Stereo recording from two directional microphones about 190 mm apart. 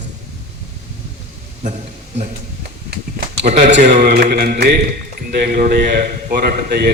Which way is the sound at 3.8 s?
40° right (ahead or behind).